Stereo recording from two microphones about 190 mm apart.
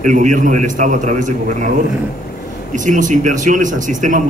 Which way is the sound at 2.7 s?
40° right (ahead or behind).